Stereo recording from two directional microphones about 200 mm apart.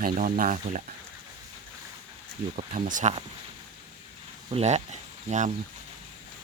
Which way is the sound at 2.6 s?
40° right (ahead or behind).